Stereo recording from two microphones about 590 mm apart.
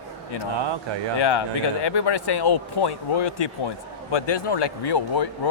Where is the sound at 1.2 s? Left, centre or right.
Left.